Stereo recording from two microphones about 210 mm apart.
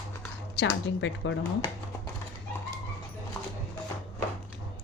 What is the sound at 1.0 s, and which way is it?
Speech, 60° left (ahead or behind).